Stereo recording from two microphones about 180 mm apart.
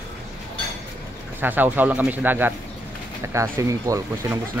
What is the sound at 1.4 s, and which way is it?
Speech, 10° right (ahead or behind).